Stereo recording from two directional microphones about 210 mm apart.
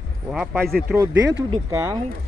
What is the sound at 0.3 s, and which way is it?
Speech, centre (ahead or behind).